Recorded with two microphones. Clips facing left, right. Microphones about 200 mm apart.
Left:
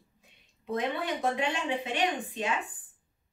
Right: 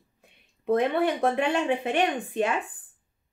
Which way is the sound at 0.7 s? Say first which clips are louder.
Right 8 dB; 55° right (ahead or behind).